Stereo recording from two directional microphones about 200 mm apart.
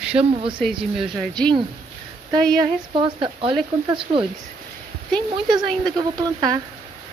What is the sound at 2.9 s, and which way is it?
Speech, 25° right (ahead or behind).